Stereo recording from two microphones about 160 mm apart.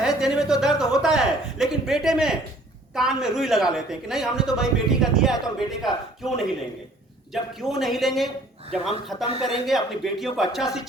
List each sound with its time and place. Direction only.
0.0 s speech: 5° right (ahead or behind)
7.6 s speech: centre (ahead or behind)